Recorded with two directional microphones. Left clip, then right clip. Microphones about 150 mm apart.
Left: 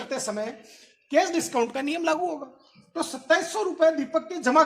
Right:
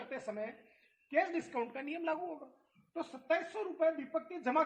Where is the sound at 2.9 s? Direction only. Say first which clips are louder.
Left 12 dB; 30° left (ahead or behind).